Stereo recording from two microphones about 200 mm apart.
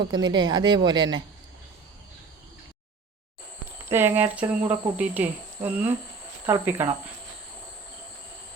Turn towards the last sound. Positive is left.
turn(degrees=-10)  # may be behind; listen again after turning